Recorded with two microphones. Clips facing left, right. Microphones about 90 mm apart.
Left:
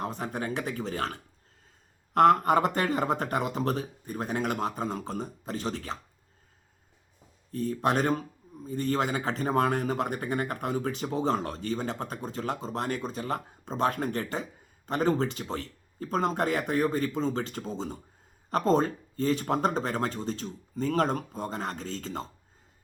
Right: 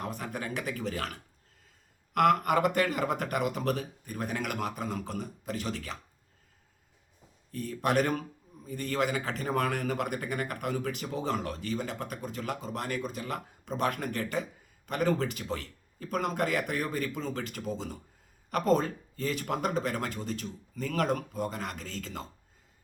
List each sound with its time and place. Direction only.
0.0 s a man's voice: 30° left (ahead or behind)
7.5 s a man's voice: 30° left (ahead or behind)